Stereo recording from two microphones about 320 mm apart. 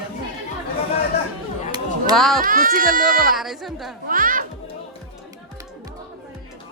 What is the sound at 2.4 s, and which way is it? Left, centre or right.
Speech, right.